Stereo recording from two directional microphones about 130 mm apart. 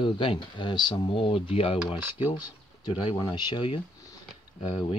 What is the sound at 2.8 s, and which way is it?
Speech, 30° left (ahead or behind).